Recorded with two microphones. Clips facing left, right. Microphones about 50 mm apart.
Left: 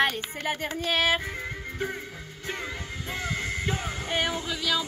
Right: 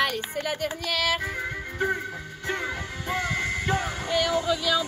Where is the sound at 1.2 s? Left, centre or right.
Centre.